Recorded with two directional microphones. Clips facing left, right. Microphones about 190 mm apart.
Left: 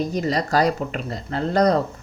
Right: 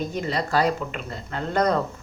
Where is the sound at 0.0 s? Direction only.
40° left (ahead or behind).